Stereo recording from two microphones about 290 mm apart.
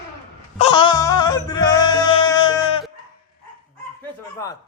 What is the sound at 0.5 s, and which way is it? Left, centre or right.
Music, centre.